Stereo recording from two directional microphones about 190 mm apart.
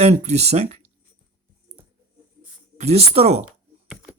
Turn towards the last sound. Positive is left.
turn(degrees=-35)  # may be behind; listen again after turning